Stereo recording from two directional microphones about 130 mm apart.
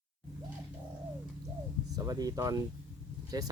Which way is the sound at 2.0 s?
30° right (ahead or behind).